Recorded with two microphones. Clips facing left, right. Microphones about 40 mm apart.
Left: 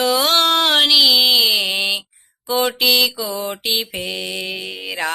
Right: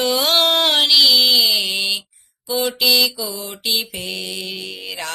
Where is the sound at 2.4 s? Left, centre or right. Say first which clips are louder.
Left 2 dB; left.